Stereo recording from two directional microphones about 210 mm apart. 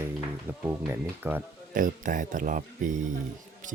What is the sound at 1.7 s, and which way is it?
Speech, 40° right (ahead or behind).